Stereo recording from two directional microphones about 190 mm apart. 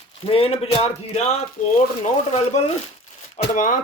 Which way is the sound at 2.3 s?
35° left (ahead or behind).